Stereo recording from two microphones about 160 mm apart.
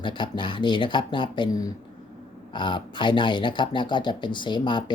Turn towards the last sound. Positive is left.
turn(degrees=30)  # may be behind; listen again after turning